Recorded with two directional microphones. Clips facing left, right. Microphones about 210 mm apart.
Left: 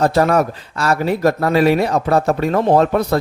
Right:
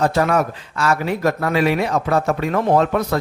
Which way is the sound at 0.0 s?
35° left (ahead or behind).